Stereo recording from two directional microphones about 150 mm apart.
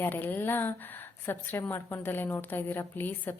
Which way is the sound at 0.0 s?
15° left (ahead or behind).